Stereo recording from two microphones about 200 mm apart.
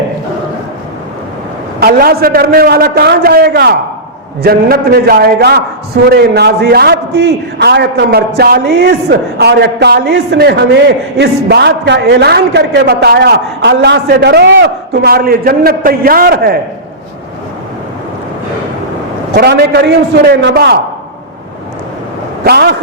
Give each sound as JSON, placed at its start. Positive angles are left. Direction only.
{"t": 1.8, "sound": "a man's voice", "side_deg": -50}
{"t": 19.4, "sound": "a man's voice", "side_deg": -55}
{"t": 22.4, "sound": "a man's voice", "side_deg": -55}